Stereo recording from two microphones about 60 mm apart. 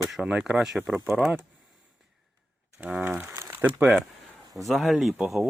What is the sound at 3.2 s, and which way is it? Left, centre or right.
Speech, right.